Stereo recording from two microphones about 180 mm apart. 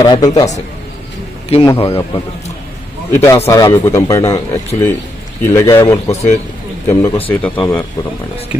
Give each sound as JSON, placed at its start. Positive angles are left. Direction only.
{"t": 0.0, "sound": "a man's voice", "side_deg": 25}
{"t": 0.3, "sound": "speech", "side_deg": 40}
{"t": 3.1, "sound": "speech", "side_deg": 15}